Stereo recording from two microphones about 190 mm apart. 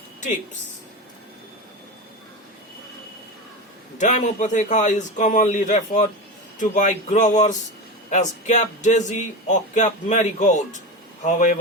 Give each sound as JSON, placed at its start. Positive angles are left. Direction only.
{"t": 3.9, "sound": "speech", "side_deg": 40}